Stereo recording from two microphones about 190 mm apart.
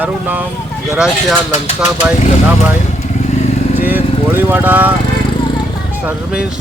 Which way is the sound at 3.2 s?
35° left (ahead or behind).